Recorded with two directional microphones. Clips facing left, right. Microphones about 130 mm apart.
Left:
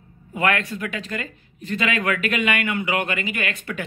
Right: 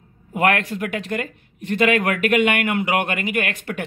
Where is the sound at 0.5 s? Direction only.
60° right (ahead or behind).